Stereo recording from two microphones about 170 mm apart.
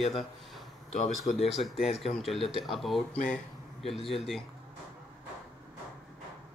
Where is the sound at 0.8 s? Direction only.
50° left (ahead or behind).